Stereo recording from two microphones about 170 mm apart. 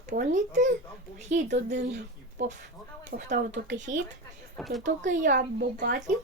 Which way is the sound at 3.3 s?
90° right.